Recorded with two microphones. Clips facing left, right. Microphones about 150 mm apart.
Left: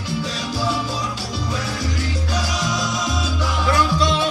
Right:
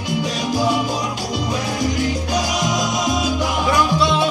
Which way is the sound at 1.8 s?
15° right (ahead or behind).